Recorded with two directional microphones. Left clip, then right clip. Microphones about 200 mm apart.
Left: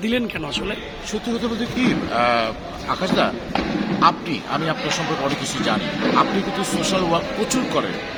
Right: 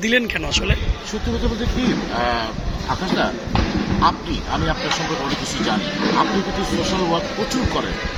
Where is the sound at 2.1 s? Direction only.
20° left (ahead or behind).